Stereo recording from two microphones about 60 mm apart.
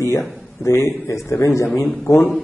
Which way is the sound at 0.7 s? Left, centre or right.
Left.